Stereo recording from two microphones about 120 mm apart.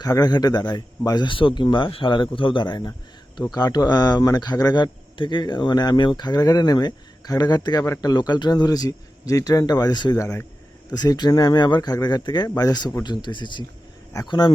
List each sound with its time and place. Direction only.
0.0 s speech: 35° left (ahead or behind)
10.2 s speech: 25° left (ahead or behind)